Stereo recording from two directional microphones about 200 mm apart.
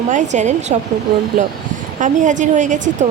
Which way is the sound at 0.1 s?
35° right (ahead or behind).